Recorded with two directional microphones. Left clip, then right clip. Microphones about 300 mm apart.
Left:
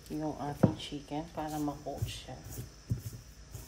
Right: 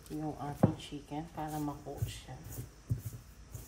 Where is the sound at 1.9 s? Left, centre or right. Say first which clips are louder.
Left 5 dB; centre.